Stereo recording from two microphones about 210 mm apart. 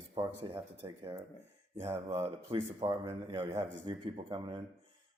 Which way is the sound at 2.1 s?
30° right (ahead or behind).